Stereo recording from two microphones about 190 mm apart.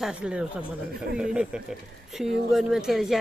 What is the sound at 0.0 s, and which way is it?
Speech, 5° right (ahead or behind).